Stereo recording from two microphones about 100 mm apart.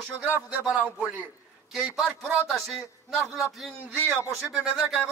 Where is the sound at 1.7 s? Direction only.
5° right (ahead or behind).